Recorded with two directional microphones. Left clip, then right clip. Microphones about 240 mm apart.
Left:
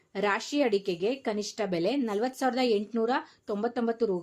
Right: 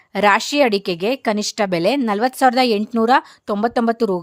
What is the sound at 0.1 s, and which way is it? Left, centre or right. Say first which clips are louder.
Speech: right 13 dB; right.